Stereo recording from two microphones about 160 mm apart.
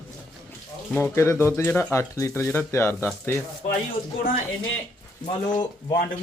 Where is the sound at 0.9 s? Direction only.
15° left (ahead or behind).